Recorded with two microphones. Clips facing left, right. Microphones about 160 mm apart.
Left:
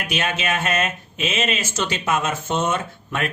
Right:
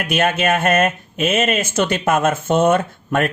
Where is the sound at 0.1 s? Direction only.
50° right (ahead or behind).